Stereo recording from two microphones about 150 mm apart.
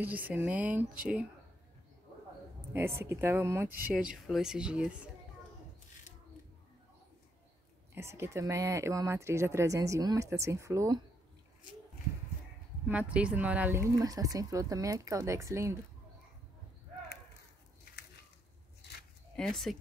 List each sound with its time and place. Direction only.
0.0 s speech: 10° right (ahead or behind)
2.7 s a woman's voice: 15° right (ahead or behind)
3.8 s speech: 5° right (ahead or behind)
7.9 s speech: 15° right (ahead or behind)
12.8 s speech: 10° right (ahead or behind)
13.9 s speech: 25° right (ahead or behind)
18.8 s a sound: 90° left
19.3 s speech: centre (ahead or behind)